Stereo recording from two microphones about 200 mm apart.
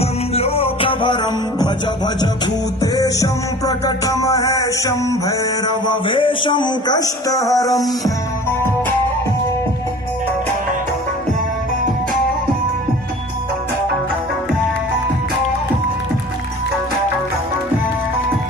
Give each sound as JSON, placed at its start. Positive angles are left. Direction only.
{"t": 0.0, "sound": "music", "side_deg": 30}
{"t": 2.8, "sound": "music", "side_deg": 20}